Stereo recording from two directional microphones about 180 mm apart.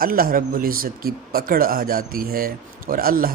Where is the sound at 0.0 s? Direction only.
55° right (ahead or behind).